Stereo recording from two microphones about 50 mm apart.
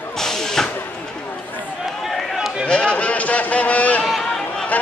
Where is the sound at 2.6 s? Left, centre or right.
Left.